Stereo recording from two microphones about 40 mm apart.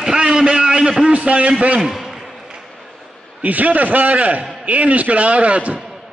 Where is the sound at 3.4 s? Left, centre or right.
Right.